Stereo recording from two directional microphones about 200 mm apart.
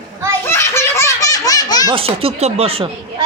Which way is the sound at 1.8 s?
30° right (ahead or behind).